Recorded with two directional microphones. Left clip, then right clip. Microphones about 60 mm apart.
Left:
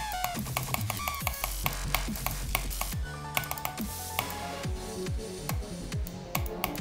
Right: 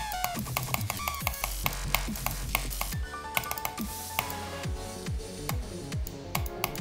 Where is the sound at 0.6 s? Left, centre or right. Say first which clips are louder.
Right 1 dB; right.